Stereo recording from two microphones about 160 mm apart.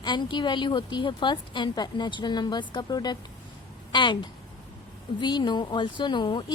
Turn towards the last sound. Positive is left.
turn(degrees=30)  # may be behind; listen again after turning